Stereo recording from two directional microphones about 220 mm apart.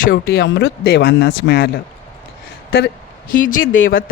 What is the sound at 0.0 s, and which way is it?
Speech, 40° left (ahead or behind).